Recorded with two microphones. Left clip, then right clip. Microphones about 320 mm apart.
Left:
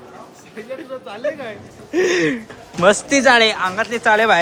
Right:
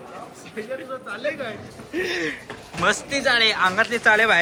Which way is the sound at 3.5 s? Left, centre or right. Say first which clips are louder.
Even; centre.